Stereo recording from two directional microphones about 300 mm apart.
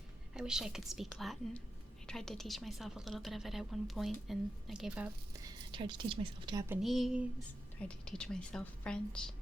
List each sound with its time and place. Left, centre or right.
0.3 s a woman's voice: centre
5.7 s speech: centre
6.8 s a woman's voice: centre